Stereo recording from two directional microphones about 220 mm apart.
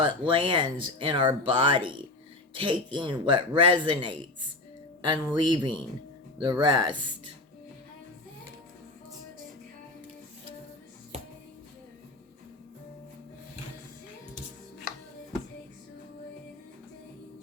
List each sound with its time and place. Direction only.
0.0 s speech: 25° right (ahead or behind)